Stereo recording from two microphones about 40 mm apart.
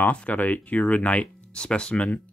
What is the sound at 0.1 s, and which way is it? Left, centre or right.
Speech, left.